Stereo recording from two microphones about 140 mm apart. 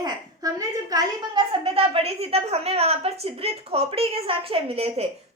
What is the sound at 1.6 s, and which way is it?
A woman's voice, 40° right (ahead or behind).